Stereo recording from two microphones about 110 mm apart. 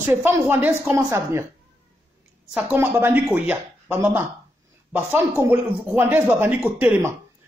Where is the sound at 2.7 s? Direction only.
20° right (ahead or behind).